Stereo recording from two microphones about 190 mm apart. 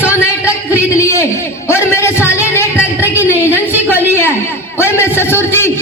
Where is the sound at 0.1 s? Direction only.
15° left (ahead or behind).